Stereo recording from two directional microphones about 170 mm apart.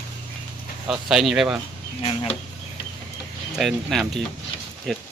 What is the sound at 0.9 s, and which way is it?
Speech, centre (ahead or behind).